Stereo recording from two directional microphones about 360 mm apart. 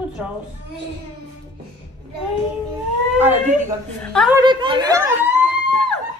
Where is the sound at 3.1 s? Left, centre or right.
Centre.